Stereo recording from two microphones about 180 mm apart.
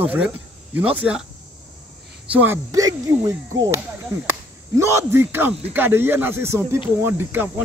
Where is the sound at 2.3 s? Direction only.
10° right (ahead or behind).